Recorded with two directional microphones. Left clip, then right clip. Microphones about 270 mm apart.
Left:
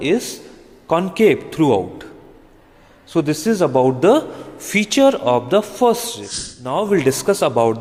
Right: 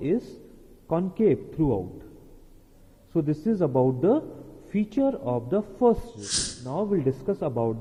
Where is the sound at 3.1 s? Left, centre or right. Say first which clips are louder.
Left 9 dB; centre.